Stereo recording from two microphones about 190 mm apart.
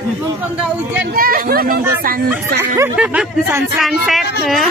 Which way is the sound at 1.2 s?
50° right (ahead or behind).